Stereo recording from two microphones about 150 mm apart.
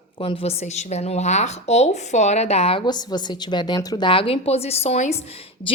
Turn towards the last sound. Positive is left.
turn(degrees=40)  # may be behind; listen again after turning